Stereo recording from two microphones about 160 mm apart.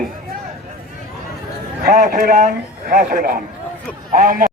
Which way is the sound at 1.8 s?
60° right (ahead or behind).